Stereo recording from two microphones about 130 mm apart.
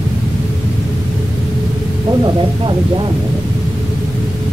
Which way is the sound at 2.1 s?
35° right (ahead or behind).